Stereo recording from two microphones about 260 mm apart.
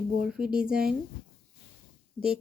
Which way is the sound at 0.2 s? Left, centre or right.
Centre.